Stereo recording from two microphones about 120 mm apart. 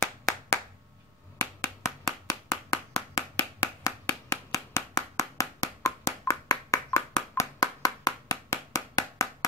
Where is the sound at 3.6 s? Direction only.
25° left (ahead or behind).